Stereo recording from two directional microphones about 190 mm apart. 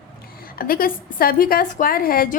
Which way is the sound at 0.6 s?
50° left (ahead or behind).